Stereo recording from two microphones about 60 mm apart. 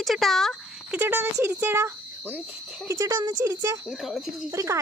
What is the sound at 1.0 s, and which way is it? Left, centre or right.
Speech, right.